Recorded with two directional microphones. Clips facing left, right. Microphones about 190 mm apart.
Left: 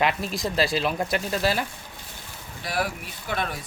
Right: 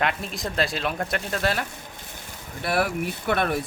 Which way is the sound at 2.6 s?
60° right (ahead or behind).